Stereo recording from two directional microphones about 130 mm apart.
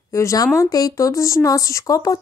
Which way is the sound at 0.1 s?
25° left (ahead or behind).